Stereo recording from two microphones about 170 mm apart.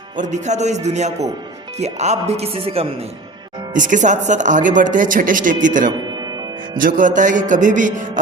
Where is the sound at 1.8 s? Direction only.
40° right (ahead or behind).